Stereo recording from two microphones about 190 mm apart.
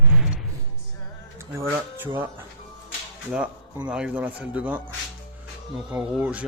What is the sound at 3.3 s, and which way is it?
Speech, 5° right (ahead or behind).